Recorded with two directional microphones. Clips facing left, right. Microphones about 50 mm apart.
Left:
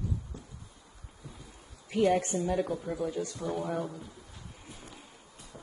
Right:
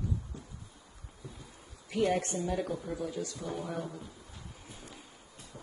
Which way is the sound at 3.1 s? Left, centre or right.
Left.